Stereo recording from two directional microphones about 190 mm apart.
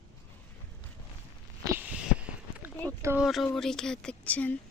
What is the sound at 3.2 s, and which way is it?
A woman's voice, centre (ahead or behind).